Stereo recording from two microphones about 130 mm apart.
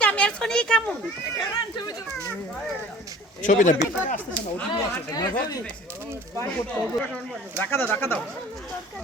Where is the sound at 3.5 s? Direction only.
75° left (ahead or behind).